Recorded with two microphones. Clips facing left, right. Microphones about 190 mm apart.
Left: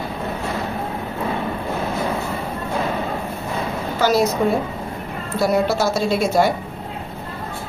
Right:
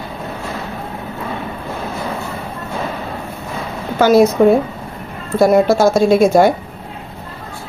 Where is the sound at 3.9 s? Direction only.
55° right (ahead or behind).